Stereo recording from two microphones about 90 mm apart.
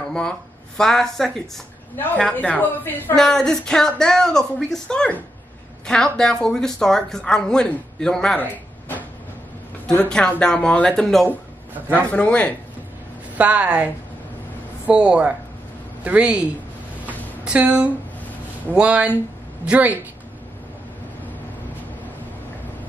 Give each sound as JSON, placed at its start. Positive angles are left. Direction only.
{"t": 0.1, "sound": "speech", "side_deg": 5}
{"t": 2.3, "sound": "a woman's voice", "side_deg": 20}
{"t": 3.2, "sound": "speech", "side_deg": 5}
{"t": 8.4, "sound": "a sound", "side_deg": 20}
{"t": 9.8, "sound": "speech", "side_deg": 10}
{"t": 13.4, "sound": "speech", "side_deg": -15}
{"t": 14.9, "sound": "speech", "side_deg": -10}
{"t": 17.5, "sound": "speech", "side_deg": -15}